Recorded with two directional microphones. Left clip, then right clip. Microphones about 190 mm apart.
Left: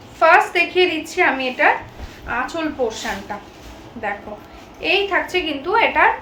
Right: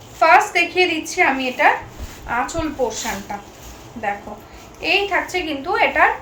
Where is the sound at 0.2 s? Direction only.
10° left (ahead or behind).